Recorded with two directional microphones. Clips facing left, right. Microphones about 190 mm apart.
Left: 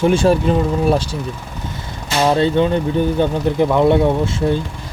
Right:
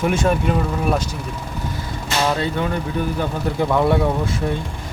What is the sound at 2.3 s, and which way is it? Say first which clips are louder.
Speech: left 7 dB; 25° left (ahead or behind).